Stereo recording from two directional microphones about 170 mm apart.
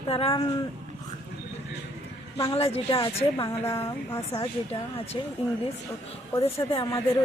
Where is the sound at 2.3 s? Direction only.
35° left (ahead or behind).